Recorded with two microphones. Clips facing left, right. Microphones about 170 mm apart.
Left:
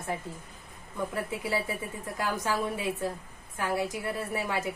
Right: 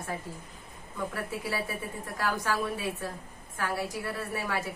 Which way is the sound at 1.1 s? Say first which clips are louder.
Left 3 dB; 20° left (ahead or behind).